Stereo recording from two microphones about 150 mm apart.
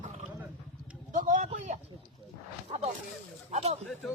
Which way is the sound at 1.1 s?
60° right (ahead or behind).